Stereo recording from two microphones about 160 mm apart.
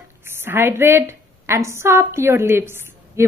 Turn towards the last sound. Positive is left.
turn(degrees=-15)  # may be behind; listen again after turning